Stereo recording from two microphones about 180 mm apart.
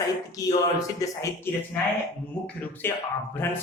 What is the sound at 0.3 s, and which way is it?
Speech, 20° left (ahead or behind).